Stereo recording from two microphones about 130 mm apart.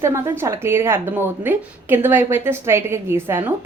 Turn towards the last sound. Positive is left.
turn(degrees=-15)  # may be behind; listen again after turning